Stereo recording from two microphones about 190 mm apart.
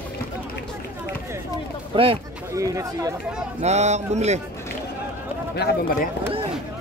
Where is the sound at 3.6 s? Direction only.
35° right (ahead or behind).